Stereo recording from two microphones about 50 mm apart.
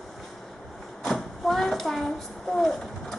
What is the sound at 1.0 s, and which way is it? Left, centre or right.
Speech, centre.